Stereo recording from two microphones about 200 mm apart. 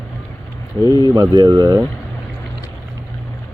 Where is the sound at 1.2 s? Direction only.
20° right (ahead or behind).